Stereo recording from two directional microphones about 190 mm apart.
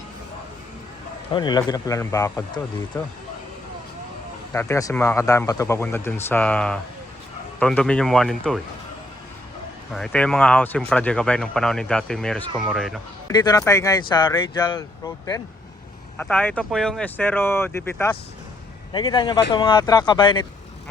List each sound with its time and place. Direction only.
1.3 s speech: 25° left (ahead or behind)
4.5 s speech: 15° left (ahead or behind)
9.9 s speech: 5° left (ahead or behind)
13.2 s speech: 20° left (ahead or behind)
16.1 s speech: 10° left (ahead or behind)
18.9 s speech: 25° left (ahead or behind)